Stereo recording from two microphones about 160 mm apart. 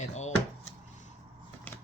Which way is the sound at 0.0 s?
45° left (ahead or behind).